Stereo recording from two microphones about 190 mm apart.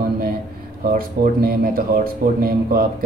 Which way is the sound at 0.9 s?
50° right (ahead or behind).